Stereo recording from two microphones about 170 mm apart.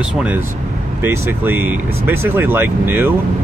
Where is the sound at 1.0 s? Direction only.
10° right (ahead or behind).